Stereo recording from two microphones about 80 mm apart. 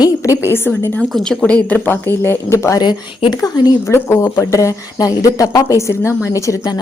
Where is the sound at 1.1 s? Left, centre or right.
Centre.